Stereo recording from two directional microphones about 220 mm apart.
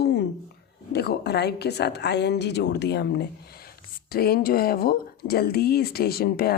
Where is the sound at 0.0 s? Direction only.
50° left (ahead or behind).